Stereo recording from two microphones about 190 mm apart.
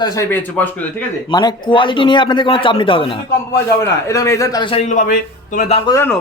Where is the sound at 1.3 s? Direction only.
25° left (ahead or behind).